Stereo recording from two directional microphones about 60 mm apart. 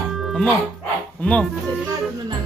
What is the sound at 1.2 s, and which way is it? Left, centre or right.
Speech, left.